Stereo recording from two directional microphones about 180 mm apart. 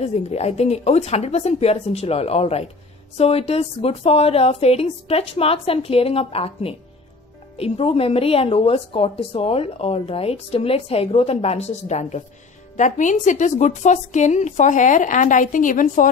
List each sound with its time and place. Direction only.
0.0 s a woman's voice: 35° left (ahead or behind)